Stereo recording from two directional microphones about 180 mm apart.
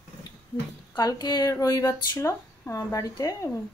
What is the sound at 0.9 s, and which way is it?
A woman's voice, 20° left (ahead or behind).